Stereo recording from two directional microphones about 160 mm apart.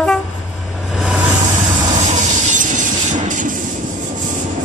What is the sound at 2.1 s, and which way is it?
Train, 50° right (ahead or behind).